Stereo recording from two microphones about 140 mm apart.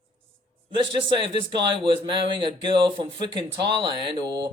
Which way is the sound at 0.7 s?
35° right (ahead or behind).